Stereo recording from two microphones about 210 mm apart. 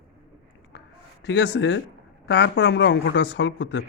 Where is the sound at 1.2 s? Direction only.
55° left (ahead or behind).